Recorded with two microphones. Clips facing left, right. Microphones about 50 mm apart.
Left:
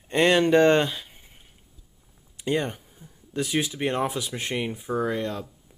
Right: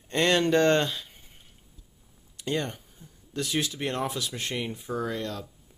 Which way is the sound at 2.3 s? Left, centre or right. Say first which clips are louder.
Left 4 dB; centre.